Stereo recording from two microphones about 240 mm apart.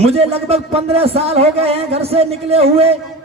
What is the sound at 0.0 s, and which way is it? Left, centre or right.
A man's voice, right.